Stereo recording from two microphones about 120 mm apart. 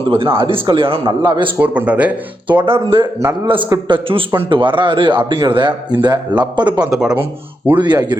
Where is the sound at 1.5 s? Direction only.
10° right (ahead or behind).